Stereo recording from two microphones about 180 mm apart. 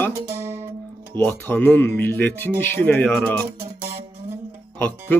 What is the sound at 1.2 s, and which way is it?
Speech, 10° left (ahead or behind).